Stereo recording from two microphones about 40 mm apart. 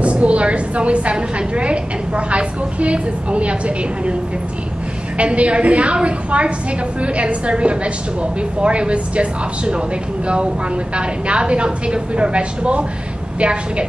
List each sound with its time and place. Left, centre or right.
0.0 s a woman's voice: right